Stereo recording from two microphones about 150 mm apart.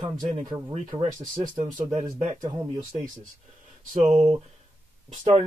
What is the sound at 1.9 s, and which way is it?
Mantra, 55° right (ahead or behind).